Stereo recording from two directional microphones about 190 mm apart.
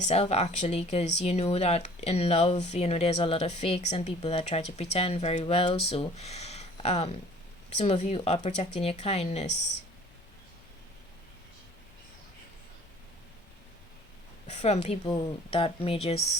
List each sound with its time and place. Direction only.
0.0 s speech: 35° left (ahead or behind)
14.4 s speech: 35° left (ahead or behind)